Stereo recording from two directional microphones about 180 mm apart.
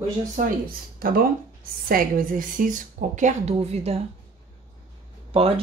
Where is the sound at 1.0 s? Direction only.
55° right (ahead or behind); by 4.0 s 35° right (ahead or behind).